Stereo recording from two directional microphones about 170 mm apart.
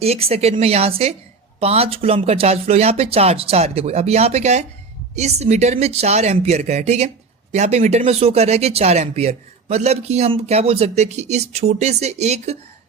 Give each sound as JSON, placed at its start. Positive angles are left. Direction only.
{"t": 0.0, "sound": "speech", "side_deg": -35}